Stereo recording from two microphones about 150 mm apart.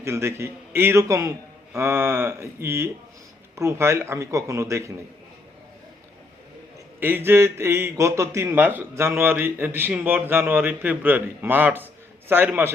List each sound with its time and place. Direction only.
0.0 s a man's voice: 20° right (ahead or behind)
7.0 s a man's voice: 15° right (ahead or behind)